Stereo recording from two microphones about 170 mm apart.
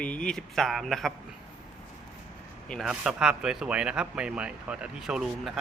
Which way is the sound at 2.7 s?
Centre (ahead or behind).